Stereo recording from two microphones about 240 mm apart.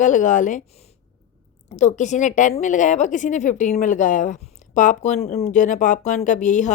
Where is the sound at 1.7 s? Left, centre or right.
Left.